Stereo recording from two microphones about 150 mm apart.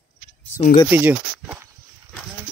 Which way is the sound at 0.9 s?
10° right (ahead or behind).